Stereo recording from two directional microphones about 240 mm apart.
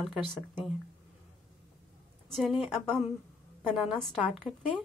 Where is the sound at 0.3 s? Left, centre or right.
Centre.